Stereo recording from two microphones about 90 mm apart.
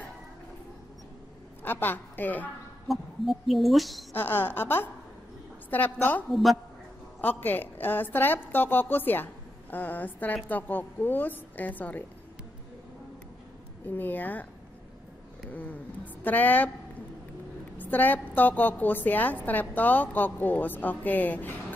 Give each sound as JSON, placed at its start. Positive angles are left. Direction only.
{"t": 1.6, "sound": "a woman's voice", "side_deg": 20}
{"t": 2.9, "sound": "speech", "side_deg": 0}
{"t": 4.1, "sound": "a woman's voice", "side_deg": 20}
{"t": 13.8, "sound": "a woman's voice", "side_deg": 20}
{"t": 16.3, "sound": "a woman's voice", "side_deg": 20}
{"t": 17.7, "sound": "a woman's voice", "side_deg": 20}